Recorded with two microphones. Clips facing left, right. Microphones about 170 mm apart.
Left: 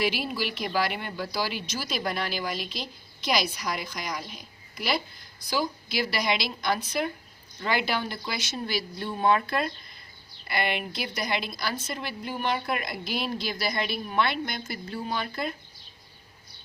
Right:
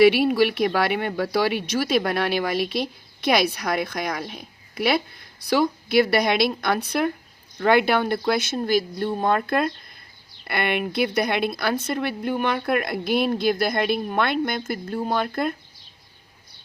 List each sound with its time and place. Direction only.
0.0 s speech: 60° right (ahead or behind)